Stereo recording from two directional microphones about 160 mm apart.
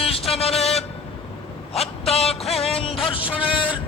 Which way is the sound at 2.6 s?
35° left (ahead or behind).